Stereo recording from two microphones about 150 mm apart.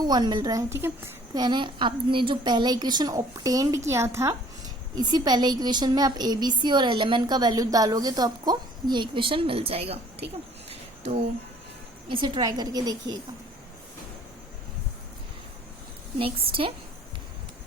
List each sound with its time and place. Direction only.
0.0 s a woman's voice: 25° right (ahead or behind)
10.7 s a sound: 45° right (ahead or behind)
12.0 s a woman's voice: 35° right (ahead or behind)
16.1 s a woman's voice: 35° right (ahead or behind)